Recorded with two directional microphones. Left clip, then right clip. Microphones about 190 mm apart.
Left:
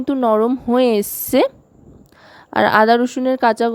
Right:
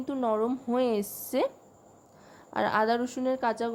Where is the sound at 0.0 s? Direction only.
40° left (ahead or behind).